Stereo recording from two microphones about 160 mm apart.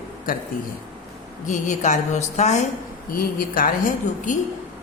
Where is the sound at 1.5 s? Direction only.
50° left (ahead or behind).